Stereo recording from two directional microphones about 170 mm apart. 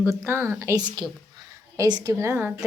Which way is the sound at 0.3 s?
15° right (ahead or behind).